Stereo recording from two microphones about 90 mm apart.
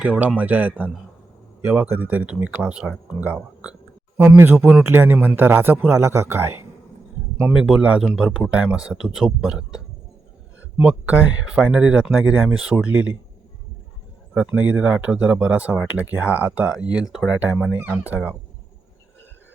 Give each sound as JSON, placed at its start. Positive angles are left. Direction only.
{"t": 0.0, "sound": "speech", "side_deg": -15}
{"t": 4.2, "sound": "speech", "side_deg": -25}
{"t": 7.3, "sound": "speech", "side_deg": -10}
{"t": 14.3, "sound": "speech", "side_deg": -15}